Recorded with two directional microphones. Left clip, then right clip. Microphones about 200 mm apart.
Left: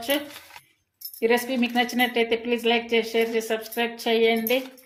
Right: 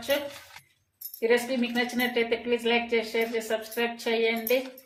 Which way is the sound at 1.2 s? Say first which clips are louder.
Left 2 dB; 45° left (ahead or behind).